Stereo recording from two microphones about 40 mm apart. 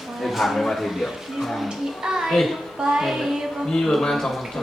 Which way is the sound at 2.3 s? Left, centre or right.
Centre.